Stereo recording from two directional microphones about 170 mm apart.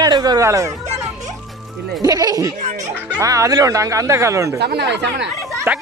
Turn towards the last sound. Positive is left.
turn(degrees=-15)  # may be behind; listen again after turning